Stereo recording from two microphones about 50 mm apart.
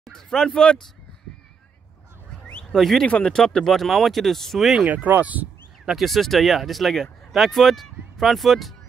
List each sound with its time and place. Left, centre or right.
0.0 s speech: centre
2.7 s speech: centre
3.1 s speech: left
3.3 s speech: centre
4.8 s speech: right
5.9 s speech: centre